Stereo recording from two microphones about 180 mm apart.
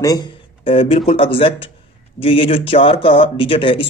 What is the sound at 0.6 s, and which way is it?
Speech, 30° left (ahead or behind).